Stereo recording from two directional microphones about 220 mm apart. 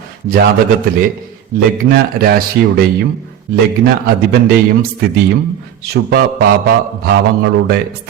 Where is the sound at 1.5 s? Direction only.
45° right (ahead or behind).